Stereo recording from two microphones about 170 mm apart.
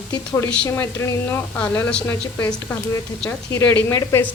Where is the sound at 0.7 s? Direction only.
15° left (ahead or behind).